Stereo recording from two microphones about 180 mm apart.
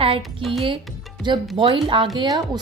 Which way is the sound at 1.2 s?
25° right (ahead or behind).